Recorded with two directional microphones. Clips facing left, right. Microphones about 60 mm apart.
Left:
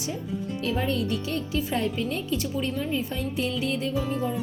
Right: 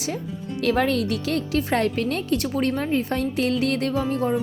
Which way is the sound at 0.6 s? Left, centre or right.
Right.